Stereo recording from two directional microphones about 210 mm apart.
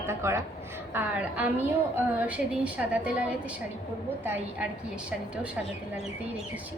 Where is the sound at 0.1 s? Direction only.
10° right (ahead or behind).